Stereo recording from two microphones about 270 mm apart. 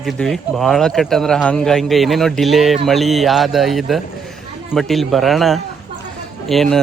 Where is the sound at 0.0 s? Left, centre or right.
Centre.